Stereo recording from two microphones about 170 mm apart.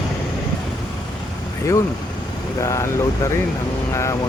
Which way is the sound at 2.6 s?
20° left (ahead or behind).